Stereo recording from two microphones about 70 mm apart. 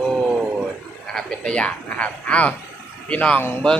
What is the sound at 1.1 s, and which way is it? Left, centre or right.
Speech, centre.